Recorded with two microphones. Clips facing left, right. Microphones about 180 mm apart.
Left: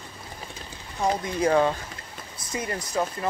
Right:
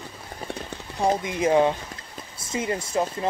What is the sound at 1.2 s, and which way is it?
Speech, 20° right (ahead or behind).